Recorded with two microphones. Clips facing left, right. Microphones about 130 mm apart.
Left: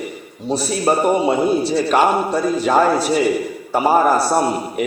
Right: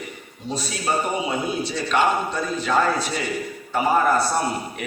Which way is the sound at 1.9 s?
40° left (ahead or behind).